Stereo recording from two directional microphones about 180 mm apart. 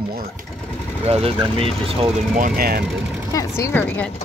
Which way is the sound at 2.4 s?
50° right (ahead or behind).